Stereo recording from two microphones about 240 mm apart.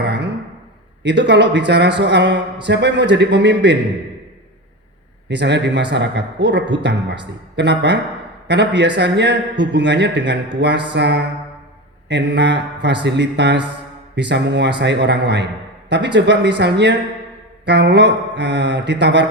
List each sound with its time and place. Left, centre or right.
0.0 s a sound: right
1.0 s a man's voice: right
5.3 s a man's voice: right